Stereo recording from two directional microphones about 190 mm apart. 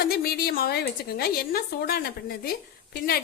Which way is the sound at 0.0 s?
55° left (ahead or behind).